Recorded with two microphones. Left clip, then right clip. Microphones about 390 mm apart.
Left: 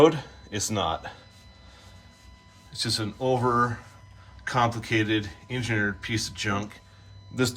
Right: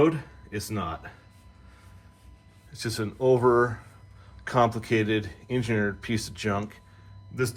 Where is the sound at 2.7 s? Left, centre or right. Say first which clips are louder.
Left 4 dB; centre.